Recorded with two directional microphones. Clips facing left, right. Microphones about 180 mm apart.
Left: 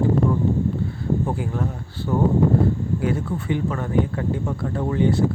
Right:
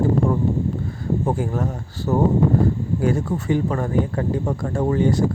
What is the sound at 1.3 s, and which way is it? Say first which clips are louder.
Speech: right 3 dB; 40° right (ahead or behind).